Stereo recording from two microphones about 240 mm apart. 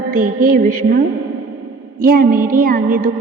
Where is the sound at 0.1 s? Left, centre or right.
Right.